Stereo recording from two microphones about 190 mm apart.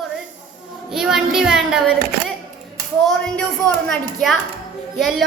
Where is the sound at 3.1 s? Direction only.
5° left (ahead or behind).